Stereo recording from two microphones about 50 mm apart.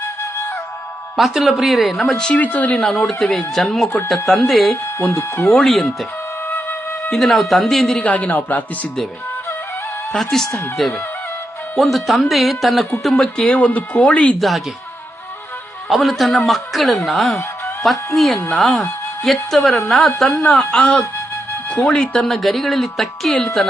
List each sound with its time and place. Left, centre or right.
1.1 s speech: centre
2.1 s speech: centre
2.4 s speech: left
3.2 s speech: centre
7.1 s speech: centre
8.0 s speech: left
10.3 s speech: centre
13.2 s speech: centre
14.3 s speech: centre
15.9 s speech: centre
20.3 s speech: left
22.3 s speech: centre